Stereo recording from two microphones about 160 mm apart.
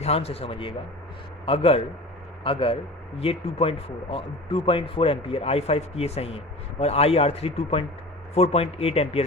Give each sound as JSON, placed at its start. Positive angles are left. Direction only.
{"t": 0.0, "sound": "speech", "side_deg": 40}